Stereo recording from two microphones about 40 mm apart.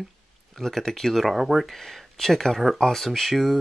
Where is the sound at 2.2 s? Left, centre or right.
Centre.